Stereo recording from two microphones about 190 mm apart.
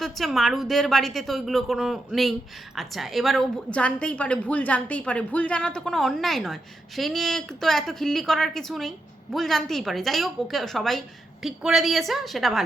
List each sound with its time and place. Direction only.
0.0 s a woman's voice: centre (ahead or behind)